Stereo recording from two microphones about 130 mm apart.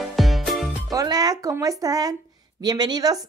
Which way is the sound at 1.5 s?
30° right (ahead or behind).